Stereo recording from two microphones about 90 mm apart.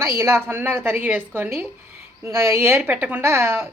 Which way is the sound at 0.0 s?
30° right (ahead or behind).